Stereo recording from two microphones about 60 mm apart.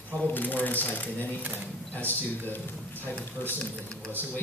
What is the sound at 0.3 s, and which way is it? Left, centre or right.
Speech, left.